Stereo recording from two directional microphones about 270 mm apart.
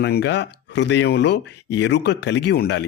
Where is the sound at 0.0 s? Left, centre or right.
Left.